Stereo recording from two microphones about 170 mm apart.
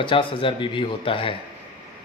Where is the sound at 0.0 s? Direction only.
30° left (ahead or behind).